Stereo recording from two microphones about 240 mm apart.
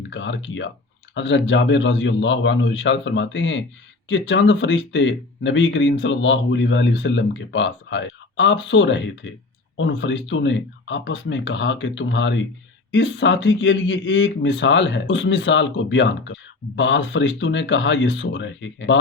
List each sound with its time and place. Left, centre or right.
0.1 s speech: left